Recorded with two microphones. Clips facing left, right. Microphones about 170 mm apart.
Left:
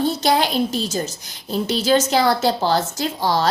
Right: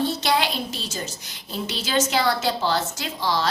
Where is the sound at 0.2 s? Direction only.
45° left (ahead or behind).